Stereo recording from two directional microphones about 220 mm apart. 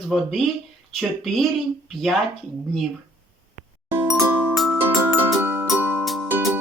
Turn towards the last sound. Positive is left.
turn(degrees=-10)  # may be behind; listen again after turning